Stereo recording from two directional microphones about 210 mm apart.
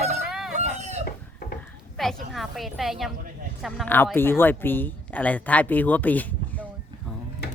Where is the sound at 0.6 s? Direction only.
30° right (ahead or behind).